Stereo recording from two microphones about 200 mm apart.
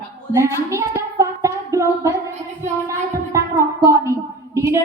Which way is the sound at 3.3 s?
15° right (ahead or behind).